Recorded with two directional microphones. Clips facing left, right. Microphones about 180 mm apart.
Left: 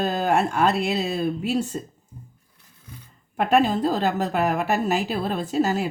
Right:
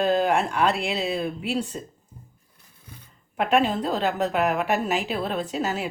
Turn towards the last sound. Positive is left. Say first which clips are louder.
# left 4 dB
turn(degrees=40)  # may be behind; listen again after turning